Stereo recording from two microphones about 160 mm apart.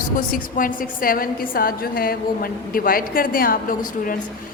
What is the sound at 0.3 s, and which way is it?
A man's voice, 60° left (ahead or behind).